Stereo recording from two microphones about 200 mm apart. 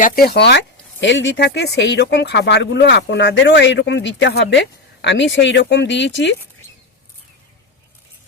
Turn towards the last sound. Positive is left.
turn(degrees=60)  # may be behind; listen again after turning